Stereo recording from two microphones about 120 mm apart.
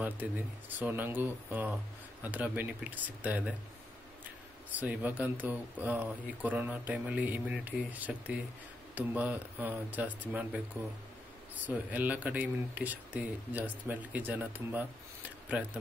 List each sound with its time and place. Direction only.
0.0 s speech: 15° right (ahead or behind)
4.7 s speech: 15° right (ahead or behind)